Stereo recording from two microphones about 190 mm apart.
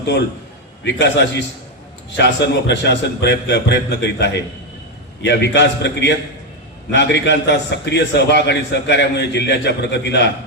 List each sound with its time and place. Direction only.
0.9 s a man's voice: 65° left (ahead or behind)